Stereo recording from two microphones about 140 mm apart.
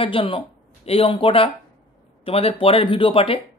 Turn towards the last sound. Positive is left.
turn(degrees=40)  # may be behind; listen again after turning